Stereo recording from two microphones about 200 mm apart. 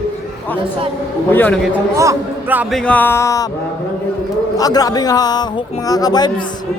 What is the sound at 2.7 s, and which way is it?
Speech, 5° left (ahead or behind).